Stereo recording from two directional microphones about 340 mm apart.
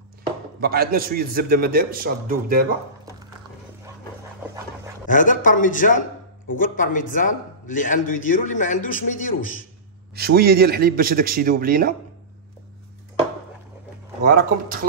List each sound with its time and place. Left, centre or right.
0.6 s a man's voice: right
5.0 s a man's voice: left
10.1 s a man's voice: right
14.2 s a man's voice: right